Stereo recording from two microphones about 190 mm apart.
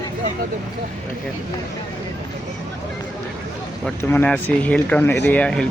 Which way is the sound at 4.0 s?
10° left (ahead or behind).